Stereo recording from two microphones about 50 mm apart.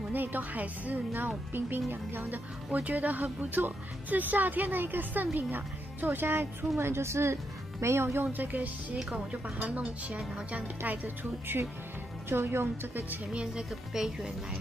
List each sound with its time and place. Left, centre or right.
0.1 s a woman's voice: right
1.5 s a woman's voice: right
2.7 s a woman's voice: right
6.8 s a woman's voice: right
8.3 s speech: right
12.3 s a woman's voice: right
13.3 s a woman's voice: right